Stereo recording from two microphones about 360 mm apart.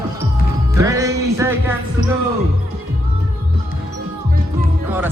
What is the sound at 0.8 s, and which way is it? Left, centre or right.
Music, centre.